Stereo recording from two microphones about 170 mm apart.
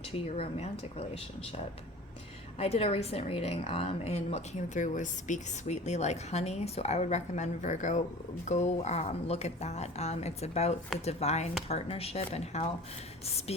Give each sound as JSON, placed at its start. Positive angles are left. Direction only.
{"t": 0.1, "sound": "a woman's voice", "side_deg": 35}
{"t": 2.6, "sound": "a woman's voice", "side_deg": 40}